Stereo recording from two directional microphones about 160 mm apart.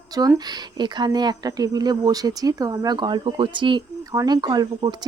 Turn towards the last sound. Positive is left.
turn(degrees=-25)  # may be behind; listen again after turning